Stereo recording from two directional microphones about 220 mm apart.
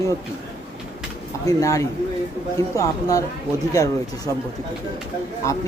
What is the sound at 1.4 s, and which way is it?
Speech, 15° left (ahead or behind).